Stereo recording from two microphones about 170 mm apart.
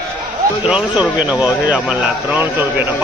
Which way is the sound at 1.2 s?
10° right (ahead or behind).